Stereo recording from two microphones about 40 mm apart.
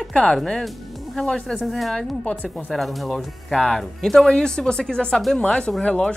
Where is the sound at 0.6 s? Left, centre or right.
Centre.